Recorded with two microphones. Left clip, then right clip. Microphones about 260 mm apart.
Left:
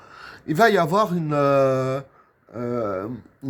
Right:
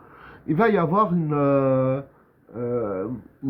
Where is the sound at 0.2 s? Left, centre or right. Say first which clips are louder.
Left 3 dB; left.